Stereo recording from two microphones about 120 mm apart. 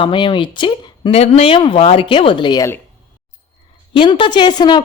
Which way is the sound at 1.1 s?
60° left (ahead or behind).